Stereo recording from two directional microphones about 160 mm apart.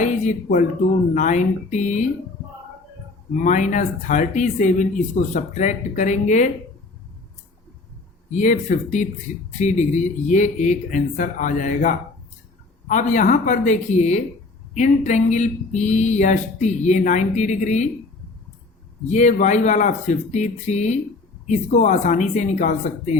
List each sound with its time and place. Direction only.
0.0 s a sound: 50° left (ahead or behind)
1.1 s speech: 50° left (ahead or behind)
3.4 s speech: 50° left (ahead or behind)
8.3 s speech: 50° left (ahead or behind)
19.0 s speech: 50° left (ahead or behind)